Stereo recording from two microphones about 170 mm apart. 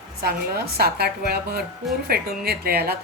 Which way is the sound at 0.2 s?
65° right (ahead or behind).